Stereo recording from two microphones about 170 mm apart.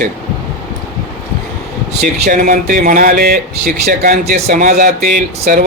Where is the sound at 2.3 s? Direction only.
55° right (ahead or behind).